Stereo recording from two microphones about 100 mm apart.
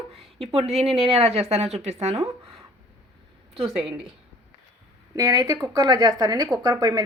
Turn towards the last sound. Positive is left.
turn(degrees=-35)  # may be behind; listen again after turning